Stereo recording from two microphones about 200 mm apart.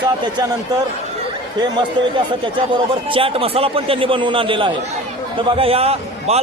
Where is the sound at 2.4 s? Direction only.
25° right (ahead or behind).